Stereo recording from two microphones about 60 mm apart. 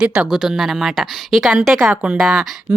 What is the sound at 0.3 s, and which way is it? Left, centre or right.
Speech, centre.